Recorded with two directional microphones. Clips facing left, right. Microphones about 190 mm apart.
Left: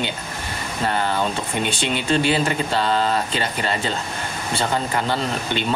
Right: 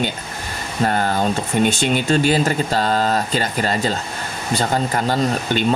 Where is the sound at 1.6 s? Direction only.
45° right (ahead or behind).